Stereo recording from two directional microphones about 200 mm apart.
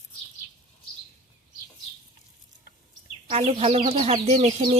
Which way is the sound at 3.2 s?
30° right (ahead or behind).